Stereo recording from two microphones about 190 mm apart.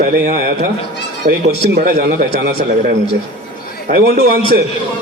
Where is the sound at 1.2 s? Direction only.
40° right (ahead or behind).